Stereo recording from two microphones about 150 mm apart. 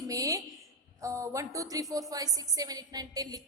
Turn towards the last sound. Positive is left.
turn(degrees=-25)  # may be behind; listen again after turning